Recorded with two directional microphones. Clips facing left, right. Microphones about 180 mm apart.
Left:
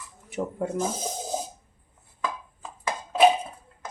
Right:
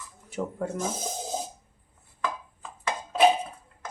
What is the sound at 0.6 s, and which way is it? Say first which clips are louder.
Cutlery: left 2 dB; 15° left (ahead or behind).